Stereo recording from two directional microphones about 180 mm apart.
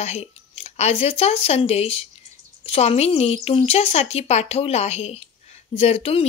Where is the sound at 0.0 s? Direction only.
35° left (ahead or behind).